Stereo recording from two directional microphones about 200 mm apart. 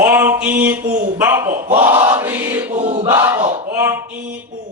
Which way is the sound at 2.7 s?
30° right (ahead or behind).